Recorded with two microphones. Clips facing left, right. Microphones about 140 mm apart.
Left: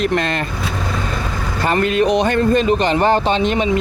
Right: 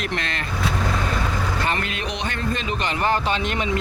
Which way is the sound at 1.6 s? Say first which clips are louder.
Left 10 dB; 40° left (ahead or behind).